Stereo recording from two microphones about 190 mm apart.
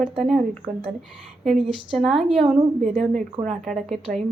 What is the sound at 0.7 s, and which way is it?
Speech, 30° right (ahead or behind).